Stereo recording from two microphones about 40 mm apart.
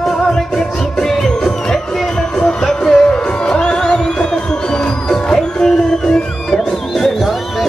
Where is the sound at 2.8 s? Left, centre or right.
Left.